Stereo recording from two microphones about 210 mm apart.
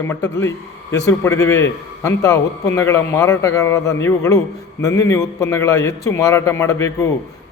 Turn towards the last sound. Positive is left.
turn(degrees=15)  # may be behind; listen again after turning